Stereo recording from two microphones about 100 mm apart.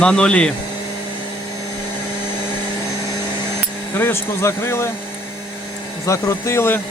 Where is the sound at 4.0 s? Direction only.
25° left (ahead or behind).